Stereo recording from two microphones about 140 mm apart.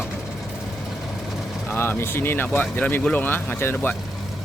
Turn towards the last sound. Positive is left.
turn(degrees=15)  # may be behind; listen again after turning